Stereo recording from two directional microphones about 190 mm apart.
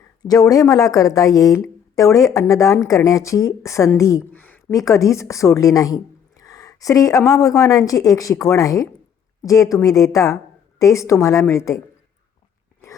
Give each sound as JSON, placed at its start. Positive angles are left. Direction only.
{"t": 0.3, "sound": "a woman's voice", "side_deg": 20}